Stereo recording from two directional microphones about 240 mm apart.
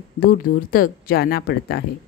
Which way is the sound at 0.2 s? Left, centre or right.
Left.